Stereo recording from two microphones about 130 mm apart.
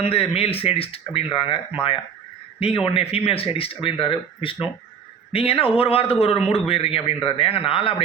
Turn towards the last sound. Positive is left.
turn(degrees=45)  # may be behind; listen again after turning